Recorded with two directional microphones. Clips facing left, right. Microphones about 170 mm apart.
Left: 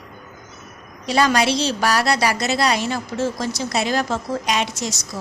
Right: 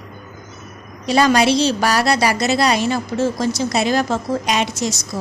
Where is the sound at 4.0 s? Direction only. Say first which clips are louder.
Right 3 dB; 20° right (ahead or behind).